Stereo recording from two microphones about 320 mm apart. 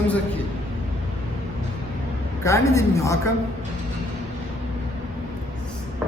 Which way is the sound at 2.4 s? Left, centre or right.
Centre.